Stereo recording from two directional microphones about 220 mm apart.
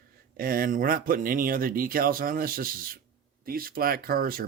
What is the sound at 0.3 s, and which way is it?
Speech, 40° right (ahead or behind).